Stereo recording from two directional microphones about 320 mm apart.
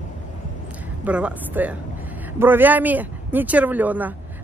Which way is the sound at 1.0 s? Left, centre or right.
Centre.